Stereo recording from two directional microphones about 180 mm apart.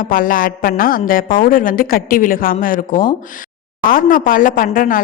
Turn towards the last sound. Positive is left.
turn(degrees=50)  # may be behind; listen again after turning